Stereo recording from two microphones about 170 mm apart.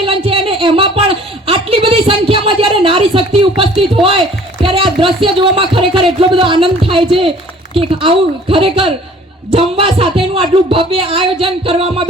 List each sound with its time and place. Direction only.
0.0 s a woman's voice: 30° right (ahead or behind)